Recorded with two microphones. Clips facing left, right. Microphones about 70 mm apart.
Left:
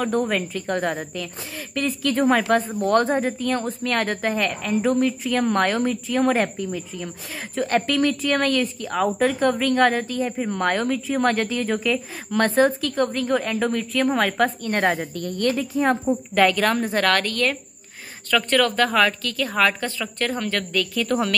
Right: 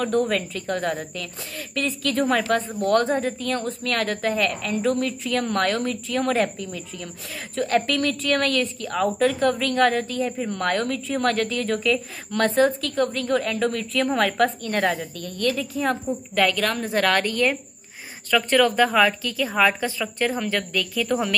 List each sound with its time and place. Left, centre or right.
0.0 s a woman's voice: centre
0.7 s a woman's voice: centre
7.6 s a woman's voice: centre
14.8 s speech: left; by 16.8 s centre
16.8 s a woman's voice: centre